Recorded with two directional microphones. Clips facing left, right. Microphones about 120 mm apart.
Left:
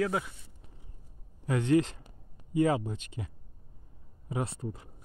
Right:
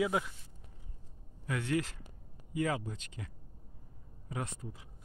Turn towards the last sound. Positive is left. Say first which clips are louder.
# left 6 dB
turn(degrees=25)  # may be behind; listen again after turning